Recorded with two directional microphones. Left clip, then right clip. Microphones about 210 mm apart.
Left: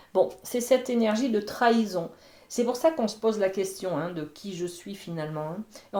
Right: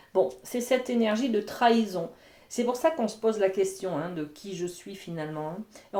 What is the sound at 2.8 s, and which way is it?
Speech, 30° left (ahead or behind).